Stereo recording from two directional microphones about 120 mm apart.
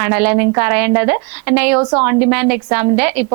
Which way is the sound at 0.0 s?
20° right (ahead or behind).